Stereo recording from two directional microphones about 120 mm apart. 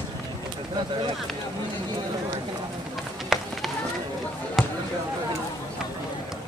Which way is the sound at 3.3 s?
Centre (ahead or behind).